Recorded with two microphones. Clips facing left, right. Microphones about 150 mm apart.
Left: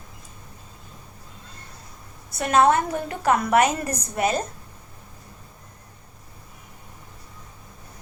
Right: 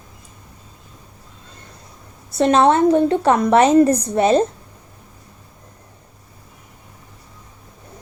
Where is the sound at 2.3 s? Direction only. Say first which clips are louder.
Right 5 dB; 25° right (ahead or behind).